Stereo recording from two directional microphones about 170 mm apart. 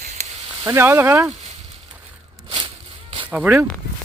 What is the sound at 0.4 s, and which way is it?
Speech, 15° right (ahead or behind).